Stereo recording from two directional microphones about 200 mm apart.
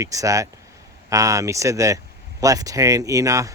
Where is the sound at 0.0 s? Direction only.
15° right (ahead or behind).